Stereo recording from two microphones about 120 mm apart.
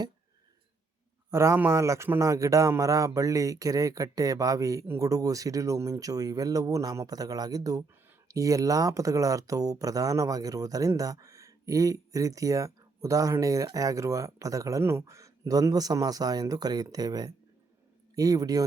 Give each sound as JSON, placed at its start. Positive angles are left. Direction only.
{"t": 1.3, "sound": "a man's voice", "side_deg": -25}